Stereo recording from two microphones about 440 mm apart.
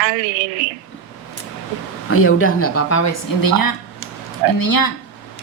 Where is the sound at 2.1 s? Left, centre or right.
Left.